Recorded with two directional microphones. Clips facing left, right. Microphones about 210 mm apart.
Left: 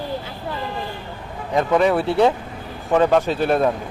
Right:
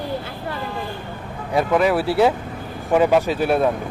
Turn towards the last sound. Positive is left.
turn(degrees=-10)  # may be behind; listen again after turning